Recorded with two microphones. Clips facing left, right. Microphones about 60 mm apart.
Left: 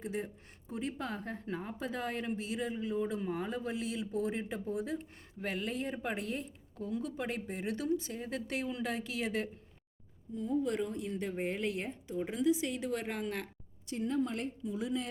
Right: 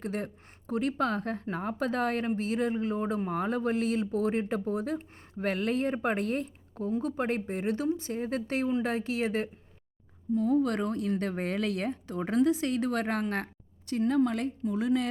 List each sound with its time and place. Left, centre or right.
0.0 s a woman's voice: right
10.3 s speech: right
14.6 s speech: right